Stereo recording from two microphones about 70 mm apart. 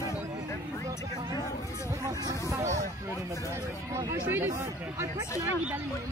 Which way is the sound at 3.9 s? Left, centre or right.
Right.